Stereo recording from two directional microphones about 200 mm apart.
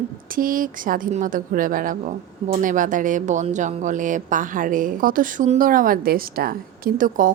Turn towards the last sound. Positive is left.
turn(degrees=-45)  # may be behind; listen again after turning